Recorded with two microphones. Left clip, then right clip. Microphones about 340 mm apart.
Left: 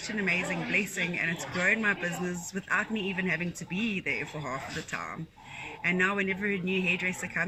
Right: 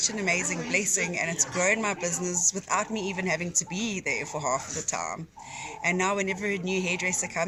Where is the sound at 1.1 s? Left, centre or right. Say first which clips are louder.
Right 3 dB; centre.